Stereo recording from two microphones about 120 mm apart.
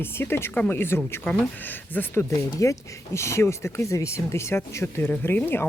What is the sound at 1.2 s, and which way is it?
Speech, 5° left (ahead or behind).